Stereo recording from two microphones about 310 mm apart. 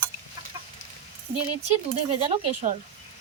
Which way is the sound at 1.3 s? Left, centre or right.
Centre.